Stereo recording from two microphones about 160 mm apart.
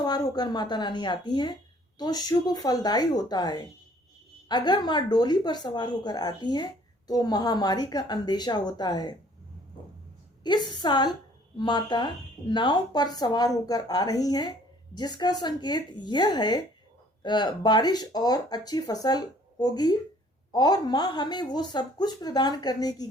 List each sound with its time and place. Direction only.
0.0 s a woman's voice: 25° left (ahead or behind)
10.4 s a woman's voice: 25° left (ahead or behind)